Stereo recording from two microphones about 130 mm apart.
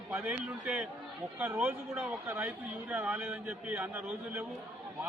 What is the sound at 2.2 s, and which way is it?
A man's voice, 15° right (ahead or behind).